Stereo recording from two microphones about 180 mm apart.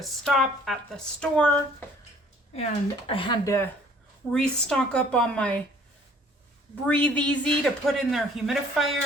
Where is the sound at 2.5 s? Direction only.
35° left (ahead or behind).